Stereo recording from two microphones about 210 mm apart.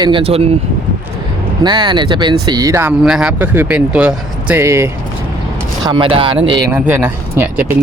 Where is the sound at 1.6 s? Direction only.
20° right (ahead or behind).